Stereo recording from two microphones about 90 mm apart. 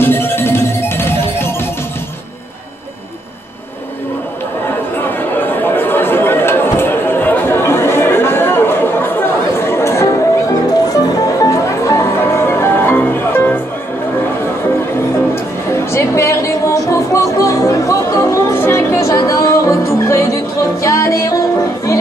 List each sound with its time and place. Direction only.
0.0 s music: 25° left (ahead or behind)
4.9 s chatter: 25° left (ahead or behind)
10.5 s music: 45° left (ahead or behind); by 13.6 s 20° left (ahead or behind)
15.7 s music: 30° left (ahead or behind)